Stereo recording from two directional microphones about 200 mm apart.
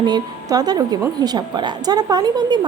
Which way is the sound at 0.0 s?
20° right (ahead or behind).